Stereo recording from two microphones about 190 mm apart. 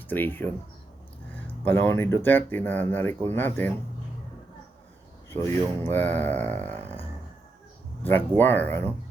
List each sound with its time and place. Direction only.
0.1 s speech: 10° left (ahead or behind)
1.6 s speech: 10° left (ahead or behind)
5.5 s speech: 10° left (ahead or behind)
6.7 s a sound: 35° right (ahead or behind)
8.0 s speech: 10° left (ahead or behind)